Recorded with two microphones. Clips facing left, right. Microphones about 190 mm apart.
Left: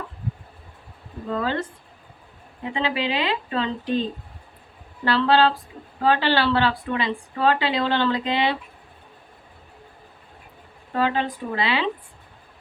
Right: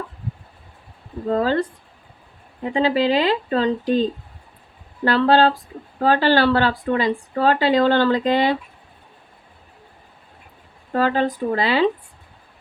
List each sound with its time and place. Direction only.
1.3 s a woman's voice: 35° right (ahead or behind)
2.6 s a woman's voice: 40° right (ahead or behind)
5.0 s speech: 45° right (ahead or behind)
10.9 s a woman's voice: 40° right (ahead or behind)